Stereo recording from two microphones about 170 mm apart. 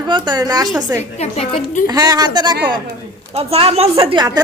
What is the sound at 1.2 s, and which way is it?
Speech, 40° left (ahead or behind).